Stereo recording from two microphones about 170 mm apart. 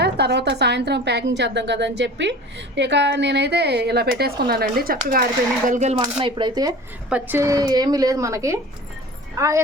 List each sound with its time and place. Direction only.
0.0 s a woman's voice: 85° right; by 5.2 s 60° right (ahead or behind)
5.6 s speech: 45° right (ahead or behind)
6.0 s a woman's voice: 30° right (ahead or behind)